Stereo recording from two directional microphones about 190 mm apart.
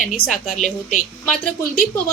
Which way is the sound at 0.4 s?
40° left (ahead or behind).